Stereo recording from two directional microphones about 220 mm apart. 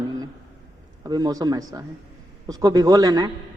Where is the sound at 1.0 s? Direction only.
15° right (ahead or behind).